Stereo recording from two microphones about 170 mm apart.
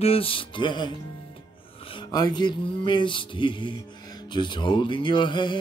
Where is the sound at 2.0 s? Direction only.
25° left (ahead or behind).